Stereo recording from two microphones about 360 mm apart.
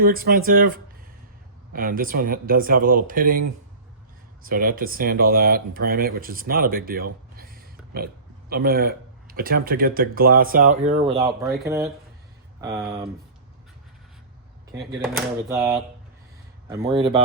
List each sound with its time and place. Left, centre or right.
0.0 s speech: right
1.7 s speech: right
4.4 s speech: right
11.3 s speech: centre
15.4 s speech: centre